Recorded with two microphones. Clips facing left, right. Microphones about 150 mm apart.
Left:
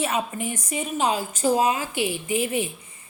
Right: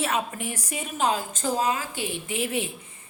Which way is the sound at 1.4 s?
15° left (ahead or behind).